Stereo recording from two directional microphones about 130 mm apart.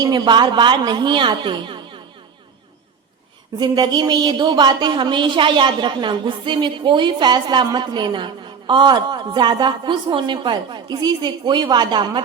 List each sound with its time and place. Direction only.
0.0 s a woman's voice: 35° right (ahead or behind)
3.6 s a woman's voice: 35° right (ahead or behind)